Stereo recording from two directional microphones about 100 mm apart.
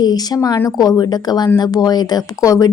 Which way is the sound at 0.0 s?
40° left (ahead or behind).